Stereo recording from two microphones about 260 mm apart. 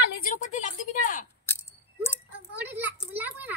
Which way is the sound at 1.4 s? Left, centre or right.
Centre.